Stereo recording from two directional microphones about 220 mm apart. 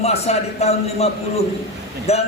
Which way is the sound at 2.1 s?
30° left (ahead or behind).